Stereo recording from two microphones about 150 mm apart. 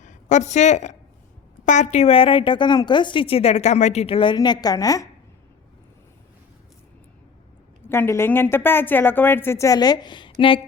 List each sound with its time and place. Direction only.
0.0 s a woman's voice: 55° left (ahead or behind); by 5.0 s 25° left (ahead or behind)
7.9 s a woman's voice: 15° left (ahead or behind); by 10.6 s 35° left (ahead or behind)